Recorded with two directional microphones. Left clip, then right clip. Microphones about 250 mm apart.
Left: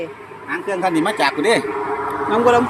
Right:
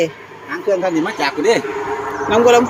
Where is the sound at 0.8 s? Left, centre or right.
Centre.